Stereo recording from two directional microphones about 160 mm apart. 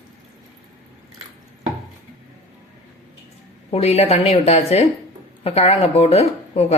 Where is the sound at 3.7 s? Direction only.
40° left (ahead or behind).